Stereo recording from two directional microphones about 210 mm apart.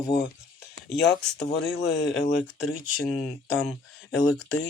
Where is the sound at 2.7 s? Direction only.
Centre (ahead or behind).